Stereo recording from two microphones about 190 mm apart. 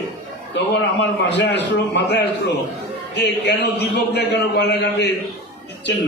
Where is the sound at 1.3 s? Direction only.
65° left (ahead or behind).